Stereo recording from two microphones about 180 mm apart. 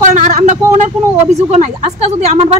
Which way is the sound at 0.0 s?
45° right (ahead or behind).